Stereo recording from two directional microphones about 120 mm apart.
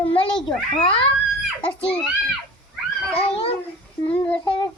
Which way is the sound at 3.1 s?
50° left (ahead or behind).